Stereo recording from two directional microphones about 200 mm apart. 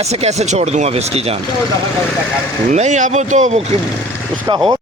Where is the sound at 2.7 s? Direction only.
35° right (ahead or behind).